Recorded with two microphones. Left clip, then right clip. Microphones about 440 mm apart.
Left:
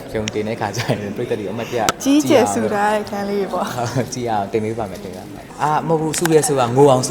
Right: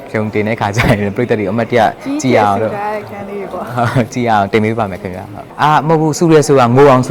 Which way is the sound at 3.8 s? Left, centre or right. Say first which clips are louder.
Right 8 dB; right.